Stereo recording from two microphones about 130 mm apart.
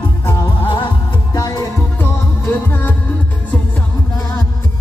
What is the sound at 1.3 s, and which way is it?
Music, 30° left (ahead or behind).